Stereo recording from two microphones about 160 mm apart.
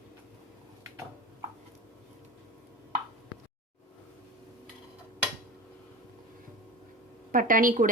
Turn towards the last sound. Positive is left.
turn(degrees=-60)  # may be behind; listen again after turning